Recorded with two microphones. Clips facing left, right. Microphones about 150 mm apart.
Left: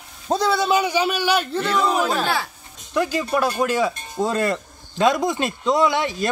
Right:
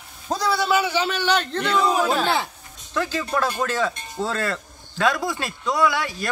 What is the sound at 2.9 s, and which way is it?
Speech, 15° left (ahead or behind).